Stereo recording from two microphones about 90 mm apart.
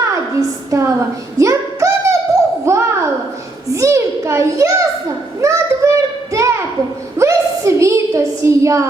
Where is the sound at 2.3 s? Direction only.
35° right (ahead or behind).